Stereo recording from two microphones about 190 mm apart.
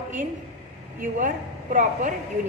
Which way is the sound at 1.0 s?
45° right (ahead or behind).